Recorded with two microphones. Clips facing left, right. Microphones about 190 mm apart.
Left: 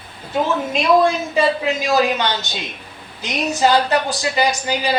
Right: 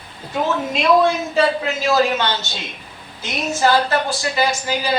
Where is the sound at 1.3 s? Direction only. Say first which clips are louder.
Even; 15° left (ahead or behind).